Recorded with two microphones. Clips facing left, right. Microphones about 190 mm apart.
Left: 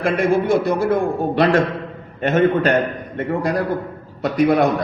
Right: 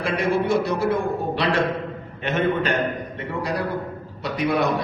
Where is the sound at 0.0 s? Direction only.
50° left (ahead or behind).